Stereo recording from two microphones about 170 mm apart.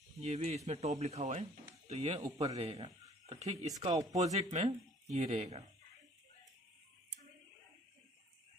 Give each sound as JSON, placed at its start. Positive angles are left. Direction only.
{"t": 0.2, "sound": "speech", "side_deg": -40}